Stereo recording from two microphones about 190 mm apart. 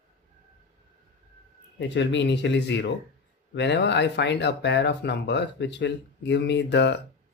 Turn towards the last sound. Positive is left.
turn(degrees=65)  # may be behind; listen again after turning